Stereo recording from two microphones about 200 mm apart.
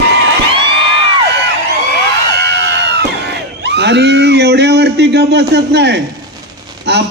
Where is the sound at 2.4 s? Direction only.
60° right (ahead or behind).